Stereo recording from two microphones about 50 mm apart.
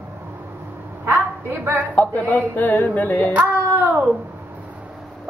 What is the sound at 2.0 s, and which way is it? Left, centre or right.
Speech, left.